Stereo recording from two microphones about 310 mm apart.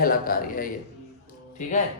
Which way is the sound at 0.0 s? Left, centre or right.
Left.